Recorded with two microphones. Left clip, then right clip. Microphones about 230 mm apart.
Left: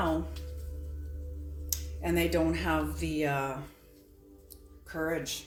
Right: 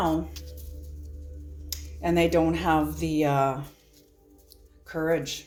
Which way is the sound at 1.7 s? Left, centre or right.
Right.